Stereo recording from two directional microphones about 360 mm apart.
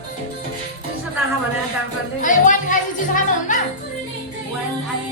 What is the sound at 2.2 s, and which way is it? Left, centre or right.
Speech, left.